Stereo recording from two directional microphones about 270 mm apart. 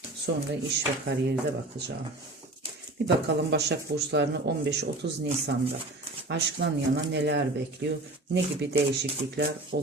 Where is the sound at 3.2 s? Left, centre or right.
Right.